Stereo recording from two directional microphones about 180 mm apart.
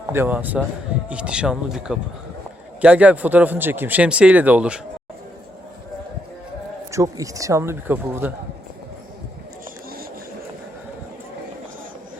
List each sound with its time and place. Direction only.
0.1 s speech: 10° right (ahead or behind)
6.9 s speech: 20° right (ahead or behind)